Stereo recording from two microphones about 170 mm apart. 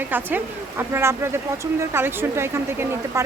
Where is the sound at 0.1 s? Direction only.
10° right (ahead or behind).